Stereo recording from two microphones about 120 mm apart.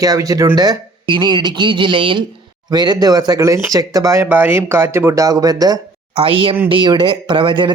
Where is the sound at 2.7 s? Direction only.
35° right (ahead or behind).